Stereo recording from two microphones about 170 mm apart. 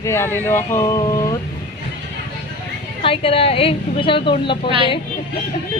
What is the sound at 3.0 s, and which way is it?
A woman's voice, 35° left (ahead or behind).